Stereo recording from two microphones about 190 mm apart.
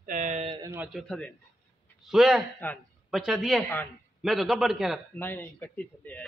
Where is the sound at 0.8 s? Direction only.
Centre (ahead or behind).